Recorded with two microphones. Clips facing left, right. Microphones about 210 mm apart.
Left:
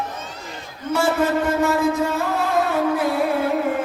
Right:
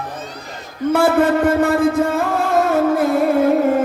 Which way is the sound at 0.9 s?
55° right (ahead or behind).